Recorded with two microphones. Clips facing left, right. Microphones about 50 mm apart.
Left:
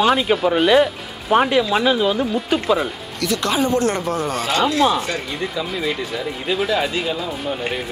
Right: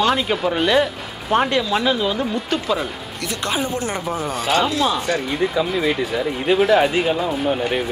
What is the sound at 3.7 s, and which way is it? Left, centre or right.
Speech, centre.